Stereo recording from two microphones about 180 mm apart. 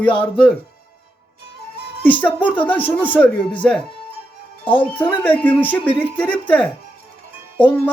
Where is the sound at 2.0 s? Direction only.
10° left (ahead or behind).